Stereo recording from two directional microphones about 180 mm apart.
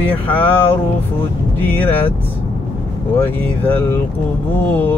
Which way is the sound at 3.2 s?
10° left (ahead or behind).